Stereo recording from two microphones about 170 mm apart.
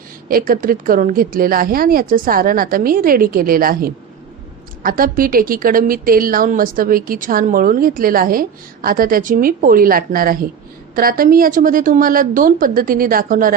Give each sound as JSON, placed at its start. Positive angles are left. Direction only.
{"t": 0.3, "sound": "a woman's voice", "side_deg": -55}